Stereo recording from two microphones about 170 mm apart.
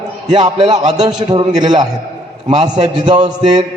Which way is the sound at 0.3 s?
25° right (ahead or behind).